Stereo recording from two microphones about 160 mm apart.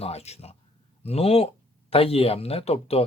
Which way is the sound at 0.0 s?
40° left (ahead or behind).